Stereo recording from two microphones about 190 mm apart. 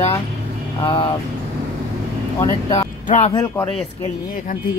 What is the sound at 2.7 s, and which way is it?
Speech, 35° left (ahead or behind).